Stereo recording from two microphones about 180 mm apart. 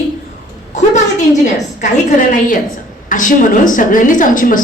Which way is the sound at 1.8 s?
45° left (ahead or behind).